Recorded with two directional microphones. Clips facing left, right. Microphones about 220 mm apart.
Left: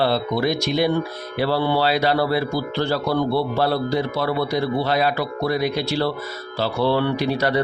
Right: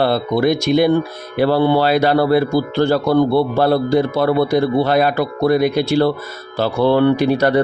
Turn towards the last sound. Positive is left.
turn(degrees=-50)  # may be behind; listen again after turning